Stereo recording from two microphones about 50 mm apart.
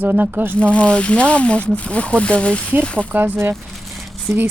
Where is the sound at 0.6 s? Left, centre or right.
Left.